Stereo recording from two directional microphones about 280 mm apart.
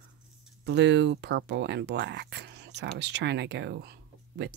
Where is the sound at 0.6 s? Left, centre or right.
Right.